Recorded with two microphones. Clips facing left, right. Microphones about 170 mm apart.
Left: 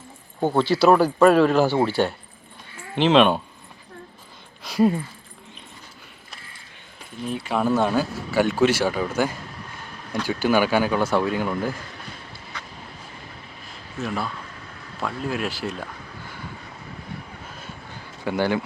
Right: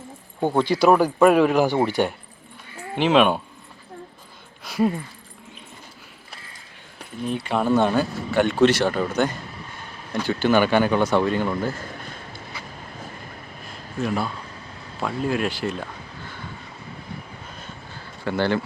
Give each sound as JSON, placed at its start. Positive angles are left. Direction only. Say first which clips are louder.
{"t": 0.4, "sound": "speech", "louder": "even", "side_deg": -15}
{"t": 4.6, "sound": "speech", "louder": "left 2 dB", "side_deg": 0}
{"t": 7.3, "sound": "speech", "louder": "right 1 dB", "side_deg": 0}
{"t": 12.5, "sound": "a sound", "louder": "left 1 dB", "side_deg": -10}
{"t": 14.0, "sound": "speech", "louder": "right 3 dB", "side_deg": 0}
{"t": 18.3, "sound": "speech", "louder": "even", "side_deg": 10}